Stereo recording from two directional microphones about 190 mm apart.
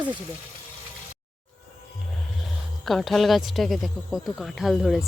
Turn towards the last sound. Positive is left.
turn(degrees=0)  # may be behind; listen again after turning